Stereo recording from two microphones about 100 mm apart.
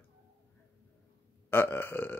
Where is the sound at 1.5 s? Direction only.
20° left (ahead or behind).